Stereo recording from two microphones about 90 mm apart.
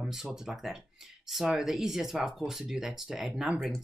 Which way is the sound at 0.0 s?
5° right (ahead or behind).